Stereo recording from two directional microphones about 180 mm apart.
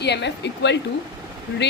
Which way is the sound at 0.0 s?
70° left (ahead or behind).